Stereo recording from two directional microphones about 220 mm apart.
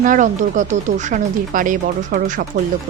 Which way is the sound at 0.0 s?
35° right (ahead or behind).